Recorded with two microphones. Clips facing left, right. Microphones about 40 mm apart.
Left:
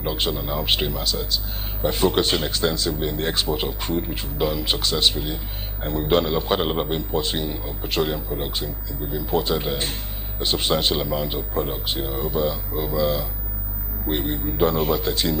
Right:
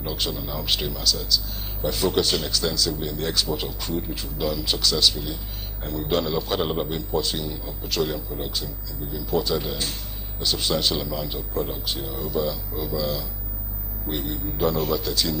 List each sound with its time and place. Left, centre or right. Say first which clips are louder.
0.0 s a man's voice: left 4 dB; left